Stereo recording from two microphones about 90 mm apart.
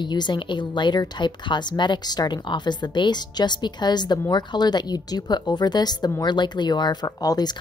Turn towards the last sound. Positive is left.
turn(degrees=45)  # may be behind; listen again after turning